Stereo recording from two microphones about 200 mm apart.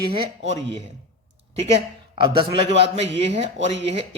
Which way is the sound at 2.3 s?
30° right (ahead or behind).